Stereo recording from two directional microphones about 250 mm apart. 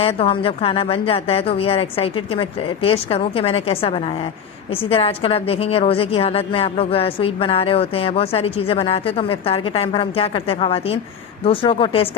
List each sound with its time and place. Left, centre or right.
0.0 s a woman's voice: left